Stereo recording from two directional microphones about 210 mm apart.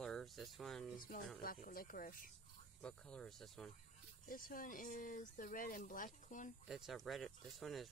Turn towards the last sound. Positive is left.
turn(degrees=0)  # may be behind; listen again after turning